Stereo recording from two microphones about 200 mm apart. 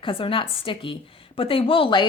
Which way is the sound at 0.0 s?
25° left (ahead or behind).